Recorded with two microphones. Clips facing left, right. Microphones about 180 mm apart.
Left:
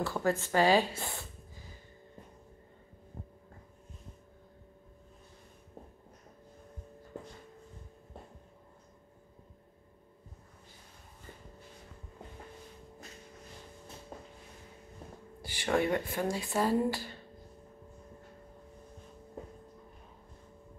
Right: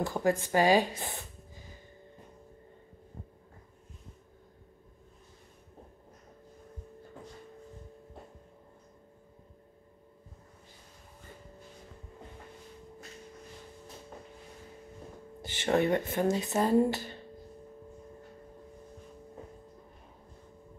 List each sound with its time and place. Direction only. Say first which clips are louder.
0.0 s speech: right 2 dB; 15° right (ahead or behind)
15.4 s speech: right 3 dB; 25° right (ahead or behind)